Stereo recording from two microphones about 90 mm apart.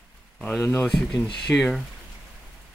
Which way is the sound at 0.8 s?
5° left (ahead or behind).